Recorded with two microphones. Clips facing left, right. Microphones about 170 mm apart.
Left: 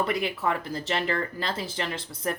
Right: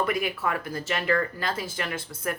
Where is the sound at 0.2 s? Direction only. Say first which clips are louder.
Left 1 dB; 30° left (ahead or behind).